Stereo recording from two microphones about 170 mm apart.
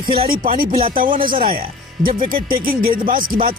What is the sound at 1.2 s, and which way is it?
Speech, 55° right (ahead or behind).